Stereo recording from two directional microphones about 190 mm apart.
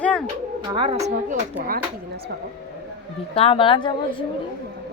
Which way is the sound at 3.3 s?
30° left (ahead or behind).